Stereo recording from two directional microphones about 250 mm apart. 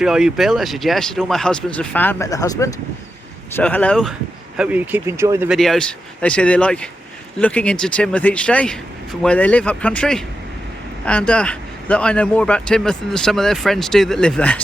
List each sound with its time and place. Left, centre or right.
0.0 s a man's voice: centre